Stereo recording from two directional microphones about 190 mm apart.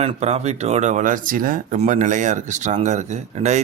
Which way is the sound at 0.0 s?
35° right (ahead or behind).